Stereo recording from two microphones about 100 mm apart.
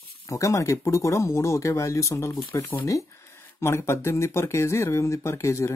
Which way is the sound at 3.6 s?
25° left (ahead or behind).